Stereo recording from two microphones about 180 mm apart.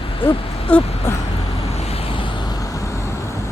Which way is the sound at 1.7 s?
35° left (ahead or behind).